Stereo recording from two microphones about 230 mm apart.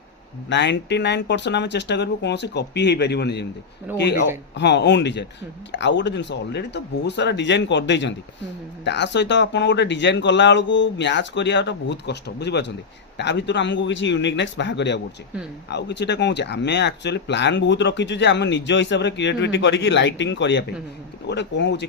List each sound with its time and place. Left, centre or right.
0.5 s speech: left